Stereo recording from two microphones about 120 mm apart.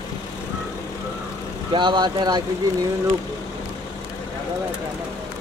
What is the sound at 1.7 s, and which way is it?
Speech, 40° right (ahead or behind).